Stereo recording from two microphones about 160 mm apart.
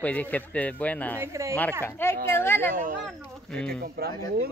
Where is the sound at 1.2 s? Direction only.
20° right (ahead or behind).